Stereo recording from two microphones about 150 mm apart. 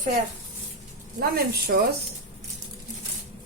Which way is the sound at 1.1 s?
85° right.